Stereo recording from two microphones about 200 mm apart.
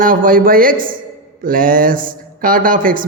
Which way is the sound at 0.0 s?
45° right (ahead or behind).